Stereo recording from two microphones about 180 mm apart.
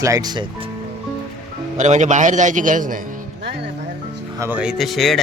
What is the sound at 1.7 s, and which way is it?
A man's voice, 40° right (ahead or behind).